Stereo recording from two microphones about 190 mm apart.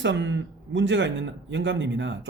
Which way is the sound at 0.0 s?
70° right (ahead or behind).